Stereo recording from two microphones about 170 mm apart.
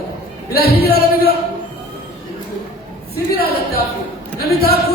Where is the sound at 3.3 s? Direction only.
65° left (ahead or behind).